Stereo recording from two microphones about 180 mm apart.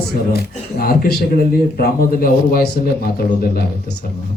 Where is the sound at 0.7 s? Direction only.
55° left (ahead or behind).